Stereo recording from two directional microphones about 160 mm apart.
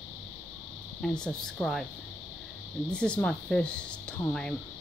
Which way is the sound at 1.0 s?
5° left (ahead or behind).